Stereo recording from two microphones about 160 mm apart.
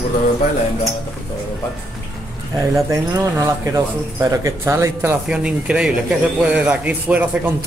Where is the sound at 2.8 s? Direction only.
20° right (ahead or behind).